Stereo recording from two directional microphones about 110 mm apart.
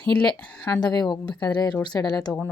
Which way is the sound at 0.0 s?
10° left (ahead or behind).